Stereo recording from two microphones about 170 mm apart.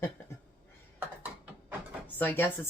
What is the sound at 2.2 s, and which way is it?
Speech, 10° left (ahead or behind).